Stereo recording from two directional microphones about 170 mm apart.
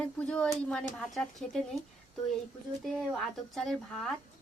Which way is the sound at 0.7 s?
5° left (ahead or behind).